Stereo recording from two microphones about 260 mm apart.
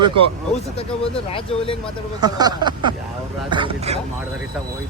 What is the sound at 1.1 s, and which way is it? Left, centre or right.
Speech, left.